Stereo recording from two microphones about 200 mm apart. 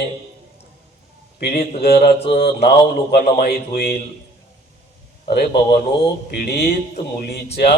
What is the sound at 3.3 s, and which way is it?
Speech, 55° left (ahead or behind).